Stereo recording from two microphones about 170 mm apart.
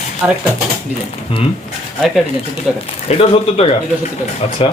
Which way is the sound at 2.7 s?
35° left (ahead or behind).